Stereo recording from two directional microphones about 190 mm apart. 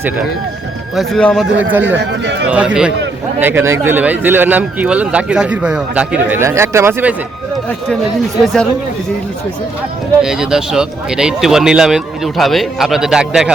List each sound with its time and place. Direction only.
0.9 s speech: centre (ahead or behind)
1.7 s speech: 10° right (ahead or behind)
2.0 s speech: 65° right (ahead or behind)
2.5 s speech: 5° right (ahead or behind)
10.2 s speech: 5° right (ahead or behind)